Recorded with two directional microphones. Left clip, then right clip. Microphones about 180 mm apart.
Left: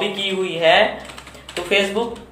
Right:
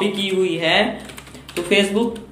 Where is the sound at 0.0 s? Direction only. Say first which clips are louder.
Right 2 dB; 30° right (ahead or behind).